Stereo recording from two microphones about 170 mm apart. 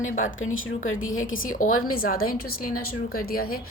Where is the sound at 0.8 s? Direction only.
55° left (ahead or behind).